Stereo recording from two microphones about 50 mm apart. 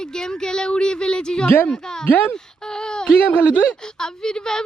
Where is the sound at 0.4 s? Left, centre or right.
Centre.